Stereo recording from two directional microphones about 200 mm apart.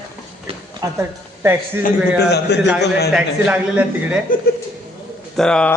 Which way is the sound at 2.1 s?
55° left (ahead or behind).